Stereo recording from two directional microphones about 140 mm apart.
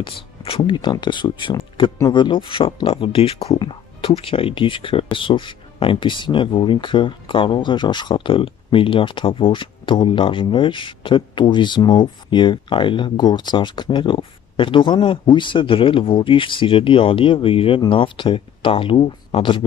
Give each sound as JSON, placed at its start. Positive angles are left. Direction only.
{"t": 0.0, "sound": "speech", "side_deg": 40}